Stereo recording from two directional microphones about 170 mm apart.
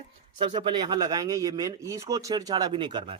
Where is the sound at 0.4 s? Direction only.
30° right (ahead or behind).